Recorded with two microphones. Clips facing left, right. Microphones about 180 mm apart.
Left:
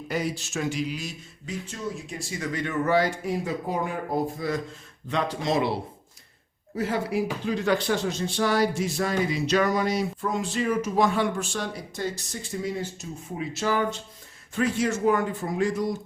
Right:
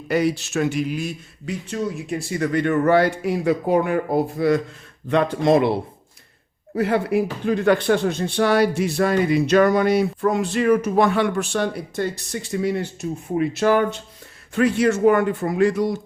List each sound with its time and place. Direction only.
0.1 s speech: 70° right (ahead or behind)
5.0 s speech: 55° right (ahead or behind)
6.7 s speech: 65° right (ahead or behind)